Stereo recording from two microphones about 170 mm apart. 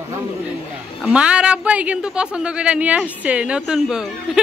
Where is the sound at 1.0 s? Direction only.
5° right (ahead or behind).